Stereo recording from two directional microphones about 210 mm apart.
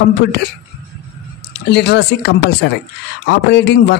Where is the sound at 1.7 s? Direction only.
50° left (ahead or behind).